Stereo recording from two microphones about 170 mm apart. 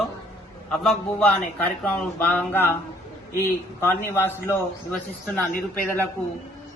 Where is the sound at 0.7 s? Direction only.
5° left (ahead or behind).